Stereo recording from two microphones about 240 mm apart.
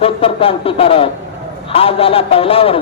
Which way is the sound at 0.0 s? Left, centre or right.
Left.